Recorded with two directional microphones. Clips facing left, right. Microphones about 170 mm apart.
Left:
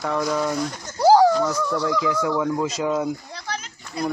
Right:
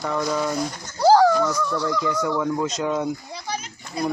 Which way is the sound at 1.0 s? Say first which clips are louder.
Left 1 dB; 15° left (ahead or behind).